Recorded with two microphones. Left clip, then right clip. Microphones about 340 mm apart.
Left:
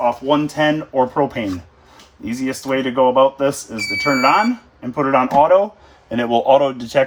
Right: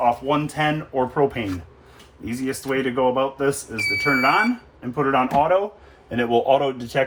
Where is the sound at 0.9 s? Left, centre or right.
Left.